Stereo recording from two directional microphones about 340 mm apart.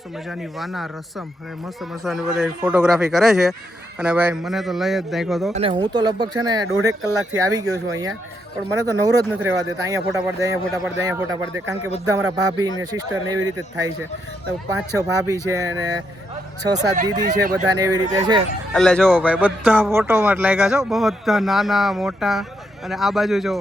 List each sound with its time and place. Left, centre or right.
0.3 s speech: centre
5.5 s speech: centre
16.6 s speech: right
17.6 s speech: centre
18.7 s speech: centre